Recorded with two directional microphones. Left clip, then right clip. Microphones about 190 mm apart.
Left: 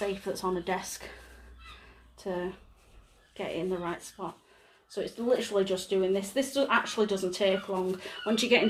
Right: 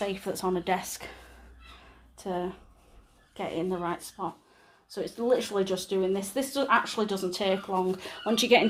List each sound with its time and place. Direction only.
0.0 s speech: 45° right (ahead or behind)
2.1 s speech: 40° right (ahead or behind)